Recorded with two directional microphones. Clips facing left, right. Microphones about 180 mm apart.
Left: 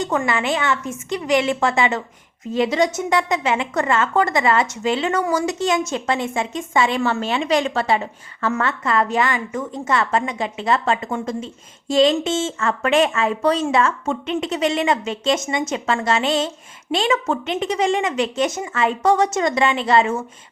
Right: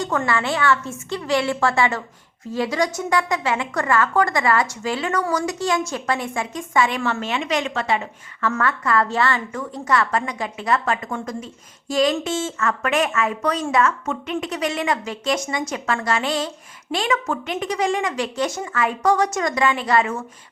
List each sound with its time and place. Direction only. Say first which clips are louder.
0.0 s a woman's voice: left 1 dB; 20° left (ahead or behind)